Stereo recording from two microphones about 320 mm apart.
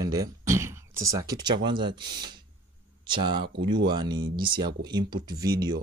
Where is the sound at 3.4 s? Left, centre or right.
Right.